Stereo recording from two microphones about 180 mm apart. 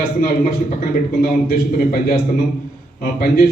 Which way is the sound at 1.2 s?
50° left (ahead or behind).